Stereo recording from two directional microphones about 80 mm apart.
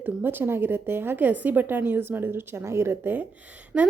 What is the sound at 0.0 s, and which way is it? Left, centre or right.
A woman's voice, right.